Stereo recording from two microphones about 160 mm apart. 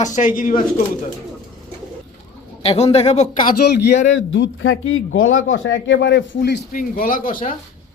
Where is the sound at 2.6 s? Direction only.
40° left (ahead or behind).